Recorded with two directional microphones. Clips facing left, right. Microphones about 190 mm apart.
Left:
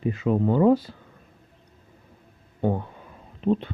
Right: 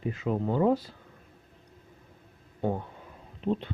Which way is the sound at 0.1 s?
90° left.